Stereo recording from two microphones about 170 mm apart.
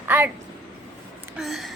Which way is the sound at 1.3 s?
Centre (ahead or behind).